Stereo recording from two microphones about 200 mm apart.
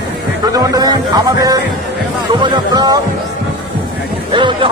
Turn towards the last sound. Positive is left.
turn(degrees=-25)  # may be behind; listen again after turning